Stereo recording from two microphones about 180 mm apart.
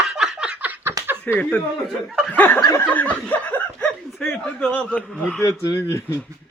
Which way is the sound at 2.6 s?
20° left (ahead or behind).